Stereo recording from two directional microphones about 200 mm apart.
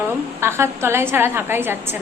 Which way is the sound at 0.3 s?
15° right (ahead or behind).